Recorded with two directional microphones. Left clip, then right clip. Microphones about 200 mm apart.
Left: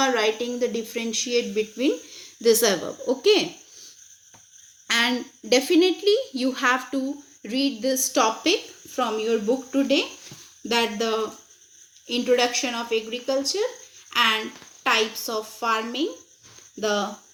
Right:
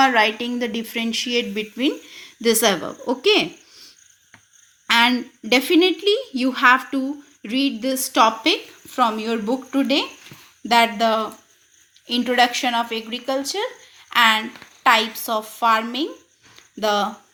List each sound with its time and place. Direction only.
0.0 s speech: 45° right (ahead or behind)
4.9 s a woman's voice: 40° right (ahead or behind)